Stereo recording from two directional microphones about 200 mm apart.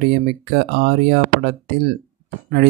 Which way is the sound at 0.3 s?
55° right (ahead or behind).